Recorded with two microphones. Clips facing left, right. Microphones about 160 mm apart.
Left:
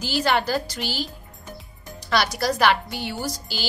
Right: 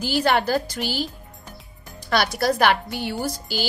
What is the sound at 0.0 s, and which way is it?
A woman's voice, 50° right (ahead or behind).